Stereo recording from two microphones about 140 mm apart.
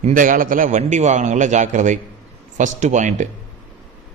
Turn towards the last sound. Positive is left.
turn(degrees=-60)  # may be behind; listen again after turning